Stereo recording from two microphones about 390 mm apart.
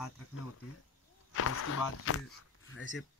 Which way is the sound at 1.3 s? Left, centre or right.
Left.